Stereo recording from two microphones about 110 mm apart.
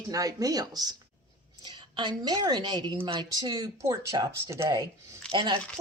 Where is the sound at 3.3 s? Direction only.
35° right (ahead or behind).